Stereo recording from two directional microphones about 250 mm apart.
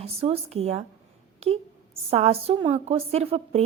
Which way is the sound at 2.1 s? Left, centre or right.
Right.